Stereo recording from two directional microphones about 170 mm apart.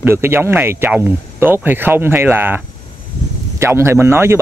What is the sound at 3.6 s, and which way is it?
Speech, 15° right (ahead or behind).